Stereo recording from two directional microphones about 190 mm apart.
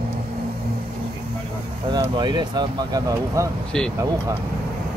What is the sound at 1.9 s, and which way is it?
Speech, 25° right (ahead or behind).